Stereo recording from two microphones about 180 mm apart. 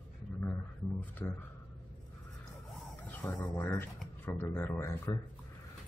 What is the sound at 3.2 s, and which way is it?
Speech, 10° left (ahead or behind).